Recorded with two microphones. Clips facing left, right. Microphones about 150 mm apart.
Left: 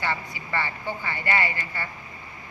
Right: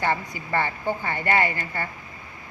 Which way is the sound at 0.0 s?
45° right (ahead or behind).